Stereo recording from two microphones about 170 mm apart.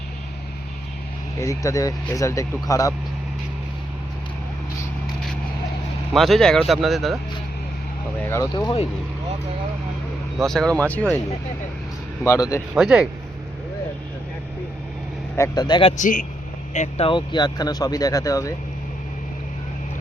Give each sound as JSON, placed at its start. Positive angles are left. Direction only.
{"t": 1.4, "sound": "speech", "side_deg": 20}
{"t": 6.1, "sound": "speech", "side_deg": 0}
{"t": 8.3, "sound": "speech", "side_deg": 20}
{"t": 10.3, "sound": "speech", "side_deg": 5}
{"t": 12.2, "sound": "speech", "side_deg": 20}
{"t": 12.7, "sound": "speech", "side_deg": -5}
{"t": 15.4, "sound": "speech", "side_deg": 25}
{"t": 16.0, "sound": "speech", "side_deg": 50}
{"t": 17.1, "sound": "speech", "side_deg": 25}